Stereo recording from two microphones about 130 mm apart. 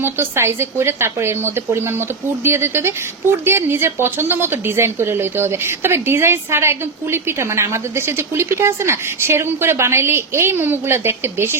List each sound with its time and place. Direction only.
0.0 s a woman's voice: 20° right (ahead or behind)